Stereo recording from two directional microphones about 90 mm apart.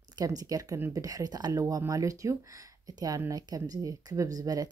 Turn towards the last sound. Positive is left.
turn(degrees=-45)  # may be behind; listen again after turning